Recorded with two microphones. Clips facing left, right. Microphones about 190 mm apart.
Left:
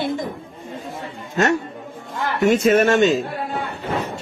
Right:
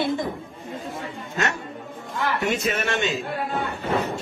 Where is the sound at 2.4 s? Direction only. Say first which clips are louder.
Left 14 dB; 45° left (ahead or behind).